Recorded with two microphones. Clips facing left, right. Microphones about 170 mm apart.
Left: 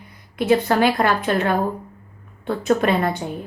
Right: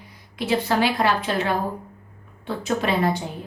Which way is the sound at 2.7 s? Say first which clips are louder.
Left 4 dB; 50° left (ahead or behind).